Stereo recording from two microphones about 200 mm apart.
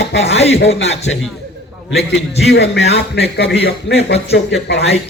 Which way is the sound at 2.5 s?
60° left (ahead or behind).